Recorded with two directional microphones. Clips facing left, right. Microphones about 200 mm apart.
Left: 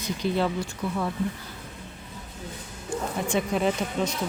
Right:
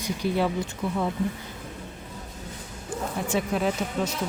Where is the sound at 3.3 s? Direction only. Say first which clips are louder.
Left 1 dB; 5° right (ahead or behind).